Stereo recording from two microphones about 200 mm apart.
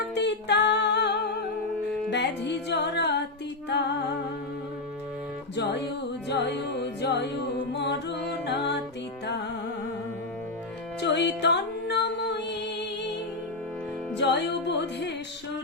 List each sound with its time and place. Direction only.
0.1 s music: 60° left (ahead or behind)
6.2 s music: 60° left (ahead or behind)
11.0 s music: 60° left (ahead or behind)
14.2 s music: 60° left (ahead or behind)